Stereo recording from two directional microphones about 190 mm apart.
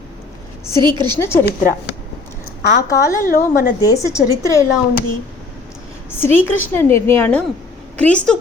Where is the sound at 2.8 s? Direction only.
15° left (ahead or behind).